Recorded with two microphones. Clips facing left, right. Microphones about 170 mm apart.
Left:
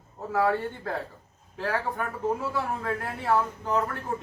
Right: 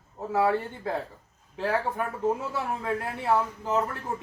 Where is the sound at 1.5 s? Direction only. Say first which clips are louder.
Right 2 dB; 20° right (ahead or behind).